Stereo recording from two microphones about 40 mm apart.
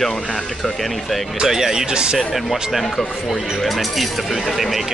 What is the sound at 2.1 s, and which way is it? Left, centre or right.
Speech, centre.